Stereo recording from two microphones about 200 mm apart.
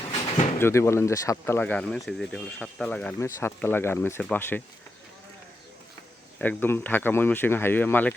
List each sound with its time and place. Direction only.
0.6 s speech: 15° left (ahead or behind)
6.4 s speech: 10° left (ahead or behind)